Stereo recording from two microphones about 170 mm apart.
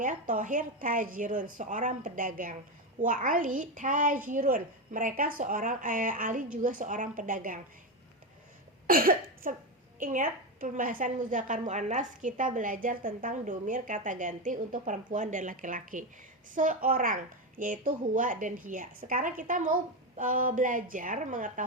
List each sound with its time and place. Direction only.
0.0 s a woman's voice: 50° right (ahead or behind)
8.9 s a woman's voice: 55° right (ahead or behind)